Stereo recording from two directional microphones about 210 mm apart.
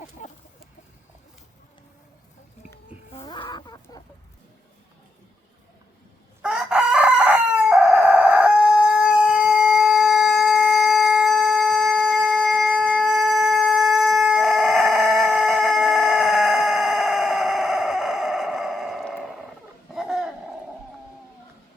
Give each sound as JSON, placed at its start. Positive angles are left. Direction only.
{"t": 0.2, "sound": "chicken", "side_deg": 35}
{"t": 3.1, "sound": "chicken", "side_deg": 25}
{"t": 6.4, "sound": "chicken", "side_deg": -5}
{"t": 20.0, "sound": "owl", "side_deg": 0}